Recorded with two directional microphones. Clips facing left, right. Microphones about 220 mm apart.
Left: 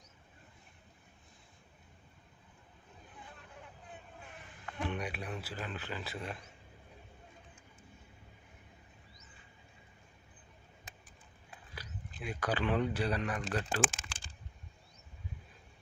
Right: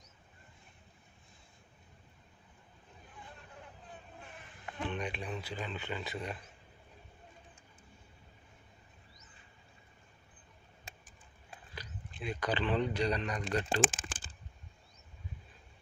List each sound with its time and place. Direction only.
4.9 s speech: 10° left (ahead or behind)
11.7 s a man's voice: 10° left (ahead or behind)
13.8 s speech: 50° right (ahead or behind)